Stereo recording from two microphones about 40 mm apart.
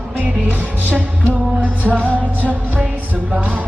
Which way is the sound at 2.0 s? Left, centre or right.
Left.